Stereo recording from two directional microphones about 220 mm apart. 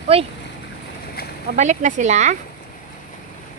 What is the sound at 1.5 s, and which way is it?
Speech, 35° right (ahead or behind).